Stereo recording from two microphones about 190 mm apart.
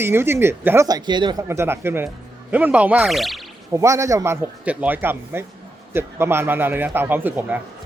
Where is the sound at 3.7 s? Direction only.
15° right (ahead or behind).